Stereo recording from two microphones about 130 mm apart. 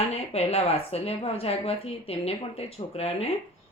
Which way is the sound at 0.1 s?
55° left (ahead or behind).